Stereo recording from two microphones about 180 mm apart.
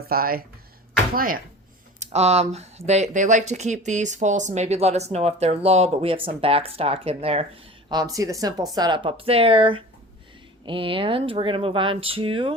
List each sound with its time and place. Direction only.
0.1 s speech: 55° right (ahead or behind)
2.0 s speech: 35° right (ahead or behind)
7.9 s speech: 20° right (ahead or behind)